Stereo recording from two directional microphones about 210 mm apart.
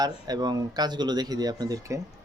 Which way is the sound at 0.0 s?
20° right (ahead or behind).